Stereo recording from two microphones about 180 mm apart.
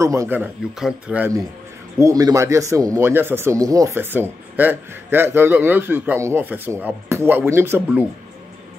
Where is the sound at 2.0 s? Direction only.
20° right (ahead or behind).